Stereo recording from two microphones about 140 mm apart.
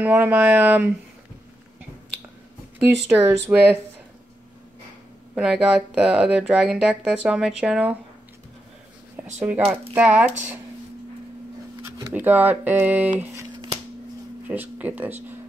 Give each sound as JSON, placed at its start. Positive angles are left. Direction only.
{"t": 0.0, "sound": "speech", "side_deg": -10}
{"t": 2.8, "sound": "speech", "side_deg": -15}
{"t": 5.3, "sound": "speech", "side_deg": -5}
{"t": 9.1, "sound": "speech", "side_deg": -10}
{"t": 12.1, "sound": "speech", "side_deg": -10}
{"t": 13.2, "sound": "shuffling cards", "side_deg": -20}
{"t": 14.5, "sound": "speech", "side_deg": -10}